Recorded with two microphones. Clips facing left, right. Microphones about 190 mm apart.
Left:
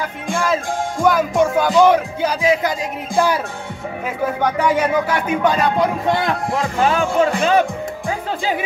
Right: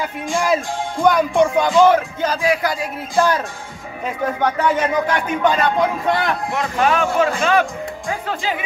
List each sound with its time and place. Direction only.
1.0 s speech: 5° left (ahead or behind)
1.9 s speech: 15° left (ahead or behind)
4.4 s speech: 10° left (ahead or behind)
6.1 s a man's voice: 25° left (ahead or behind)